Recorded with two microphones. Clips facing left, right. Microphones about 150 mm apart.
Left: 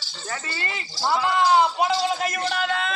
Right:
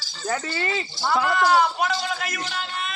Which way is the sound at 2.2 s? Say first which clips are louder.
Left 6 dB; 45° left (ahead or behind).